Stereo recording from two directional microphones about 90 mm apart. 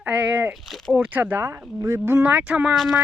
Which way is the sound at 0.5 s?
Centre (ahead or behind).